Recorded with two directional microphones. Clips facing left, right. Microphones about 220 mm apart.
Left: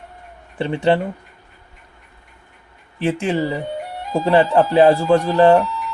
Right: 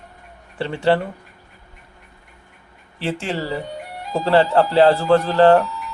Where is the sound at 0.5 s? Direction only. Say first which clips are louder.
Left 1 dB; 20° left (ahead or behind).